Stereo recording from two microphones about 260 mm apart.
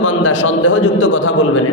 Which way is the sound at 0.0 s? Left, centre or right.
Left.